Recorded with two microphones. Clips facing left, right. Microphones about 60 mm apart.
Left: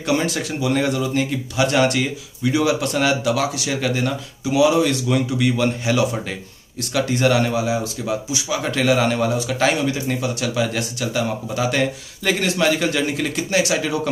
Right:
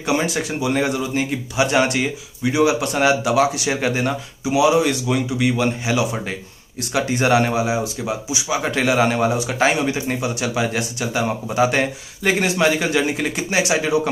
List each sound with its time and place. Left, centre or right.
0.0 s speech: centre